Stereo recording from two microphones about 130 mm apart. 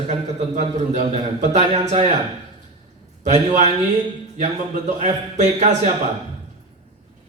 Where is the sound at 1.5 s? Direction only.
65° right (ahead or behind).